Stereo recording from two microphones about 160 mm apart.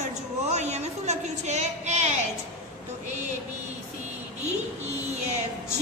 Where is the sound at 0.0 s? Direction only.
45° right (ahead or behind).